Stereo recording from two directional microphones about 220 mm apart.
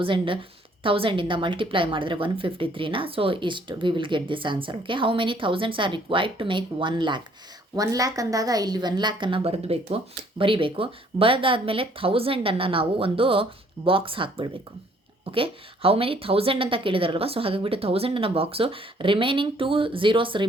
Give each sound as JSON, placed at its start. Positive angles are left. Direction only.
{"t": 0.0, "sound": "a woman's voice", "side_deg": -25}